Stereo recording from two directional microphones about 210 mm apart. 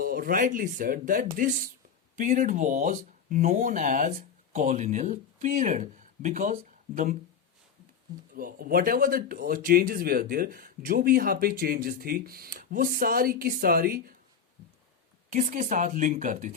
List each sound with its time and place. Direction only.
0.0 s speech: 45° right (ahead or behind)
8.4 s speech: 45° right (ahead or behind)
15.3 s speech: 40° right (ahead or behind)